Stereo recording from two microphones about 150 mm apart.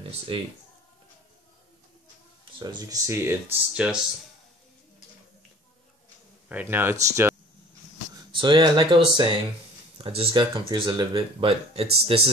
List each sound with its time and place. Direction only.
2.6 s speech: 20° right (ahead or behind)
6.5 s speech: 15° right (ahead or behind)
8.3 s speech: 30° right (ahead or behind)